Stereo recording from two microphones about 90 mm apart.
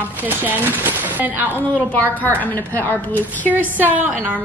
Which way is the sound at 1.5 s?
20° left (ahead or behind).